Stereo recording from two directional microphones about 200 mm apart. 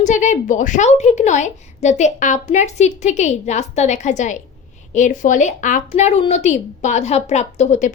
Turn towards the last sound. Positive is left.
turn(degrees=35)  # may be behind; listen again after turning